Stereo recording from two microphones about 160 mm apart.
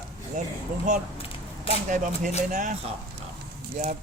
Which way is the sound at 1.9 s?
55° right (ahead or behind).